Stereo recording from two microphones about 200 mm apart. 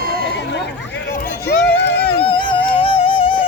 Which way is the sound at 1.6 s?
60° left (ahead or behind).